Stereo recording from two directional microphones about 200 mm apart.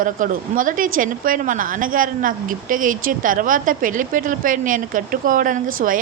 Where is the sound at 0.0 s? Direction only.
40° right (ahead or behind).